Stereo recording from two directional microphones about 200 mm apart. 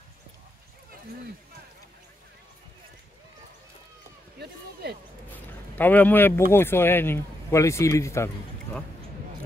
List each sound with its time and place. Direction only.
4.8 s speech: 55° right (ahead or behind)
5.3 s a sound: 10° left (ahead or behind)
6.5 s speech: 10° left (ahead or behind)